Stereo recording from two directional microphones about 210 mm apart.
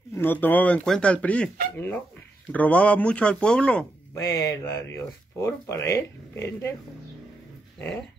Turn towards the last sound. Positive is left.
turn(degrees=10)  # may be behind; listen again after turning